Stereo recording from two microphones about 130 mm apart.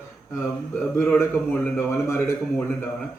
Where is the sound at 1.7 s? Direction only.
20° left (ahead or behind).